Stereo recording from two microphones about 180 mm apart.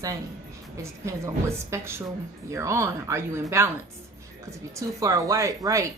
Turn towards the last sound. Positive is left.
turn(degrees=-20)  # may be behind; listen again after turning